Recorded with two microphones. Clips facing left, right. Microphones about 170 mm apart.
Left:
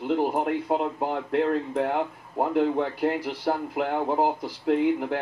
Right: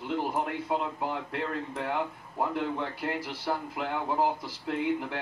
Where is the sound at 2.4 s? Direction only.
40° left (ahead or behind).